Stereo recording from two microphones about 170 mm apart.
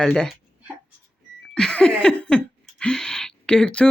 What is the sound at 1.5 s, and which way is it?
Laughter, 5° left (ahead or behind).